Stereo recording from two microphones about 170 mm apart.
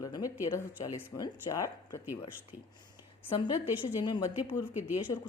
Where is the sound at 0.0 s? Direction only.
20° left (ahead or behind).